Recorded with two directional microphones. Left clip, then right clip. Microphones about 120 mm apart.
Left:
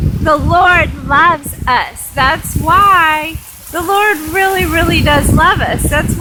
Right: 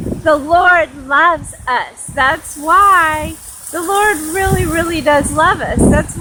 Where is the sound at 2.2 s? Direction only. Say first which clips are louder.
Left 2 dB; 15° left (ahead or behind).